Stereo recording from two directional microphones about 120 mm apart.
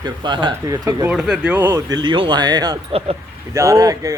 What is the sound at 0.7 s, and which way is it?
Speech, 30° right (ahead or behind).